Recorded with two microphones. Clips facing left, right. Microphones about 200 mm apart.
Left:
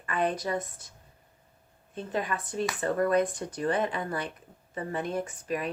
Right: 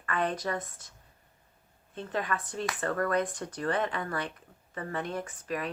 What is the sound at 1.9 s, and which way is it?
Speech, 15° left (ahead or behind).